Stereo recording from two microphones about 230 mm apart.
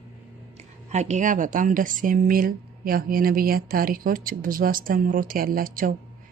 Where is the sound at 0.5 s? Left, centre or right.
Right.